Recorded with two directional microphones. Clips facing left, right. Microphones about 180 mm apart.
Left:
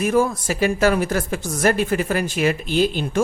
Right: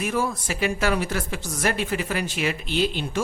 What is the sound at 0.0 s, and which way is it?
Speech, 45° left (ahead or behind).